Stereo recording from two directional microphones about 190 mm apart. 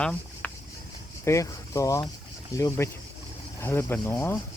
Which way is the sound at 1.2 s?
15° left (ahead or behind).